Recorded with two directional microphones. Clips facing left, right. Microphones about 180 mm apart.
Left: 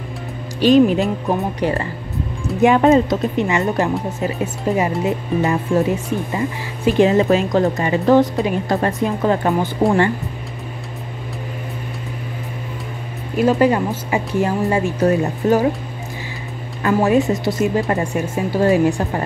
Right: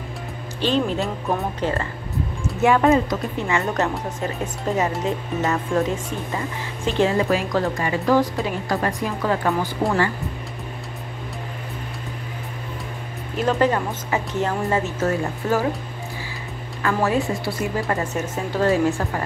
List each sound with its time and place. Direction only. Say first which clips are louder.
0.6 s speech: left 9 dB; 15° left (ahead or behind)
13.4 s speech: left 5 dB; 10° left (ahead or behind)
16.8 s speech: left 6 dB; 20° left (ahead or behind)
18.0 s speech: left 5 dB; 10° left (ahead or behind)